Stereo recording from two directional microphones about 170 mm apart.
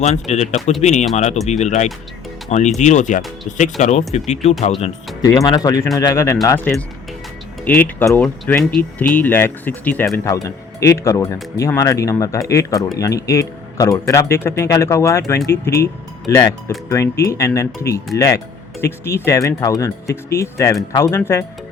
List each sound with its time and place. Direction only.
0.0 s speech: 40° left (ahead or behind)
5.2 s speech: 20° left (ahead or behind)